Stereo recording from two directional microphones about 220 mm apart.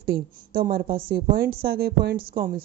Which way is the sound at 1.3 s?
45° right (ahead or behind).